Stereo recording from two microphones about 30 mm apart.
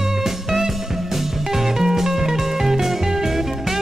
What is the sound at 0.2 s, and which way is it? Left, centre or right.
Music, centre.